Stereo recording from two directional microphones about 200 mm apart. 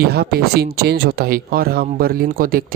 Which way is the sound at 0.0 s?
50° right (ahead or behind).